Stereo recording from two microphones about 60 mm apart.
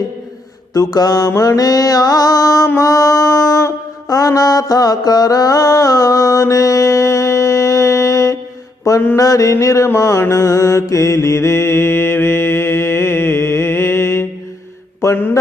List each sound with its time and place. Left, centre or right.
0.7 s mantra: left
2.8 s a sound: left
4.1 s mantra: left
15.0 s mantra: left